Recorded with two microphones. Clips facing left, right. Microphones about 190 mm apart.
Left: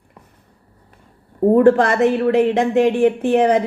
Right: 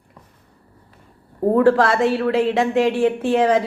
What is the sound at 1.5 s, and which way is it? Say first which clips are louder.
Speech: left 2 dB; 20° left (ahead or behind).